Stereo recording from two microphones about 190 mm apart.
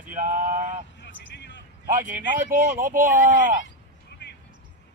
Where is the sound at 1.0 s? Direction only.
65° left (ahead or behind).